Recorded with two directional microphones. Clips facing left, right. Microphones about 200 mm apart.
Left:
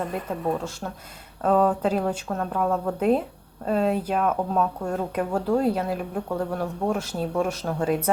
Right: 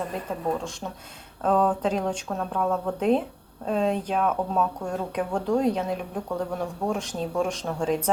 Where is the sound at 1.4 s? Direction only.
5° left (ahead or behind).